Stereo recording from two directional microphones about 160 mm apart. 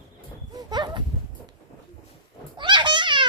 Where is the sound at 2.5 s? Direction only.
30° right (ahead or behind).